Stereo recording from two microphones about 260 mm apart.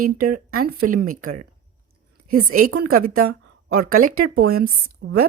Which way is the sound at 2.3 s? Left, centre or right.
Right.